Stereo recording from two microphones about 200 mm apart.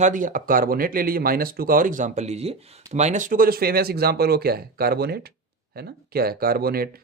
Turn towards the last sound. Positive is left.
turn(degrees=-50)  # may be behind; listen again after turning